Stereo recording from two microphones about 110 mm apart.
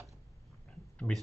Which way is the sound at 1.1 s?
10° left (ahead or behind).